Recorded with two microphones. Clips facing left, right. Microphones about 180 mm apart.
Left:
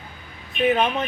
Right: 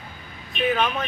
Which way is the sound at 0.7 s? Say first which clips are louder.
Left 2 dB; 25° left (ahead or behind).